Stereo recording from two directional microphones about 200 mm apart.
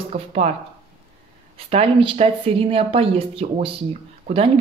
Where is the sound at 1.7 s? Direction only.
25° right (ahead or behind).